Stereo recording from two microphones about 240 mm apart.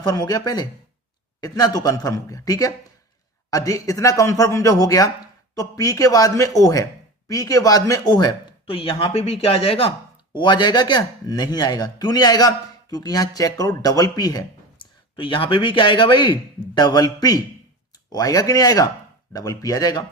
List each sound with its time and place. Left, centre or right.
0.0 s a man's voice: centre